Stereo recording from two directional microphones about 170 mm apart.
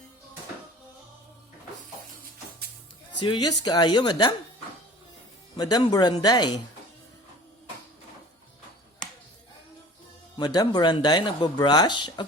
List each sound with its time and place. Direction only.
3.2 s speech: 25° left (ahead or behind)
5.5 s speech: 25° left (ahead or behind)
10.3 s speech: 25° left (ahead or behind)